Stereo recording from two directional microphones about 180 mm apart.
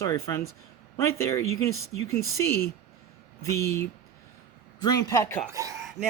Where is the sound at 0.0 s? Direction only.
15° left (ahead or behind).